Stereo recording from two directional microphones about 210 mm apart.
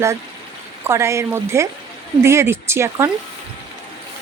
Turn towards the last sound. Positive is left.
turn(degrees=-10)  # may be behind; listen again after turning